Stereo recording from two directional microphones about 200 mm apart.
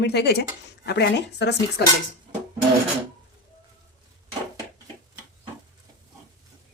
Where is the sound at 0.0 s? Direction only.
55° left (ahead or behind).